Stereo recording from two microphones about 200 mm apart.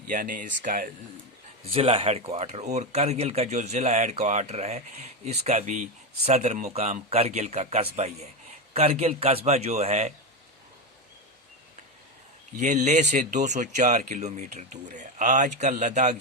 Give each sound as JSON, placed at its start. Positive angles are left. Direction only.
{"t": 0.1, "sound": "speech", "side_deg": -40}
{"t": 1.6, "sound": "speech", "side_deg": -30}
{"t": 12.5, "sound": "speech", "side_deg": -35}